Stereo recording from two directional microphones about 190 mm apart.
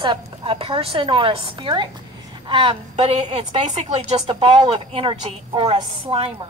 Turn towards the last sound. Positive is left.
turn(degrees=-30)  # may be behind; listen again after turning